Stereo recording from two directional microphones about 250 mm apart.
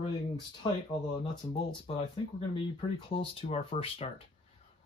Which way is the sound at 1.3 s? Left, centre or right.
Left.